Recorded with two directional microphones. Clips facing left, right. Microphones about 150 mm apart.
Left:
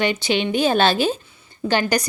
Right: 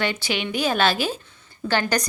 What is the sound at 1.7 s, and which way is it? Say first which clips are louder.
Speech: left 3 dB; 15° left (ahead or behind).